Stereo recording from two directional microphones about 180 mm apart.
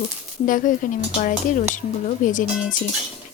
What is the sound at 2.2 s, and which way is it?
Speech, 45° left (ahead or behind).